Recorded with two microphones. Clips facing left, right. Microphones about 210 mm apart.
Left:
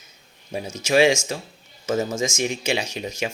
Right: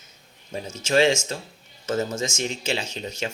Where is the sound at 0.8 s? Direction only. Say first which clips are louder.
Left 2 dB; 10° left (ahead or behind).